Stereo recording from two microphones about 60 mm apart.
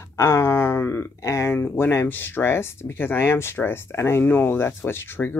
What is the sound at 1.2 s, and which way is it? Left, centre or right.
Speech, left.